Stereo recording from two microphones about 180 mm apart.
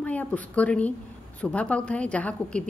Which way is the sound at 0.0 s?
10° left (ahead or behind).